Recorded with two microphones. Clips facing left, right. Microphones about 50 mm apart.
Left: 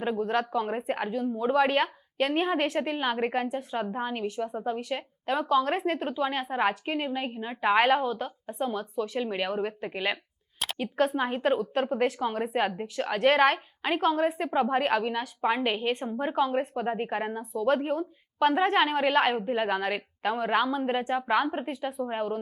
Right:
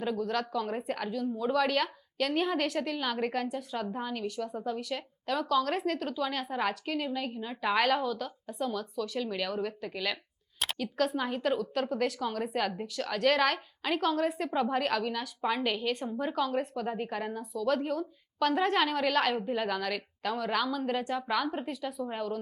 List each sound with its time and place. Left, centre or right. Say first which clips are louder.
0.0 s speech: left 4 dB; left